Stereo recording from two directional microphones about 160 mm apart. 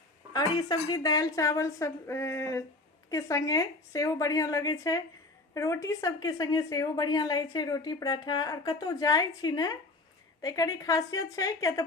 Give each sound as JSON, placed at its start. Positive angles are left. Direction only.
{"t": 0.3, "sound": "a woman's voice", "side_deg": 25}